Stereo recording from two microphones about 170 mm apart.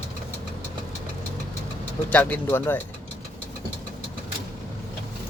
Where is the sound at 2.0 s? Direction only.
10° left (ahead or behind).